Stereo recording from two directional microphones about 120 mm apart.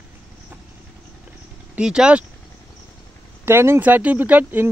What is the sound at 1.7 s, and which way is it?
Speech, 5° right (ahead or behind).